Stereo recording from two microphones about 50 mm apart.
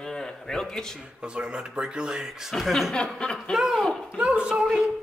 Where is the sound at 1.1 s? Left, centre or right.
Centre.